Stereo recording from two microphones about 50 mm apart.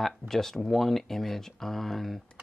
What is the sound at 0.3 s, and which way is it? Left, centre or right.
Speech, centre.